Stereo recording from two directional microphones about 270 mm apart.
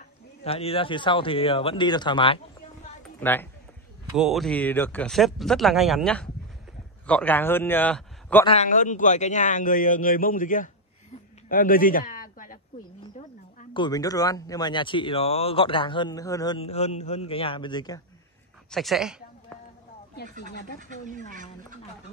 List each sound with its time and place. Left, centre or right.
0.4 s a man's voice: left
3.2 s a man's voice: centre
8.5 s a man's voice: left
11.4 s a sound: left
13.6 s speech: centre
18.7 s speech: centre
20.2 s speech: right